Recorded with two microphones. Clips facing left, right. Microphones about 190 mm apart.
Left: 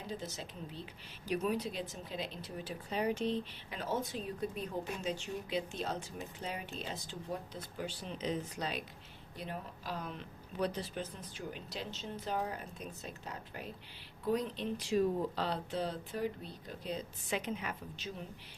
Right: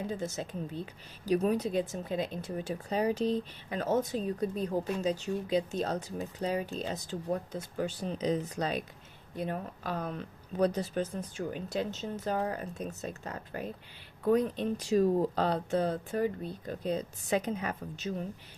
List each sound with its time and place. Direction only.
0.2 s a woman's voice: 50° right (ahead or behind)